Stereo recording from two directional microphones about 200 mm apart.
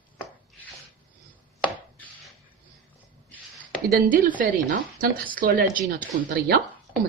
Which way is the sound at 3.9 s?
45° right (ahead or behind).